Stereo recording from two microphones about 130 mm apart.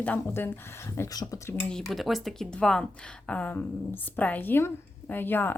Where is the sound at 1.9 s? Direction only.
Centre (ahead or behind); by 5.6 s 15° left (ahead or behind).